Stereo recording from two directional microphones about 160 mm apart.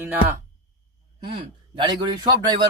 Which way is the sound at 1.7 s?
30° right (ahead or behind).